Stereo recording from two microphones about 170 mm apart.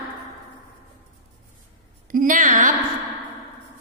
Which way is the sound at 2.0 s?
50° right (ahead or behind).